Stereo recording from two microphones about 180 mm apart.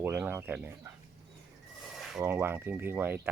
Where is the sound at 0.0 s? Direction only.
10° right (ahead or behind).